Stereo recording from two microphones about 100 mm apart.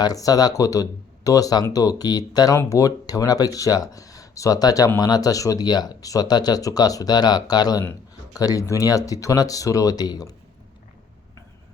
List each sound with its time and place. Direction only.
0.0 s speech: 40° left (ahead or behind)